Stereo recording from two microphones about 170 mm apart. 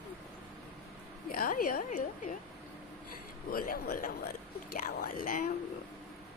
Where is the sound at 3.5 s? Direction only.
60° left (ahead or behind).